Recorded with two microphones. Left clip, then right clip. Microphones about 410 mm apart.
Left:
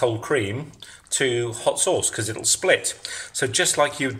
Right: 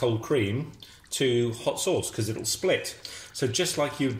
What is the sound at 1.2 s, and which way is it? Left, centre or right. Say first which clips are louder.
Speech: left 2 dB; left.